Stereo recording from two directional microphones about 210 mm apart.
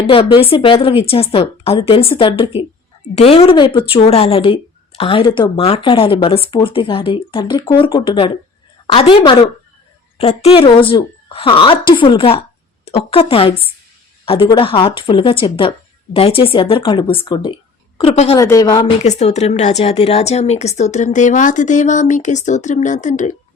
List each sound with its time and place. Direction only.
0.1 s a woman's voice: 25° left (ahead or behind)
18.3 s speech: 15° left (ahead or behind)
19.0 s speech: 30° left (ahead or behind)